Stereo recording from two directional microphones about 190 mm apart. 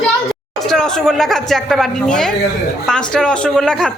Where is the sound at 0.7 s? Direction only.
5° left (ahead or behind).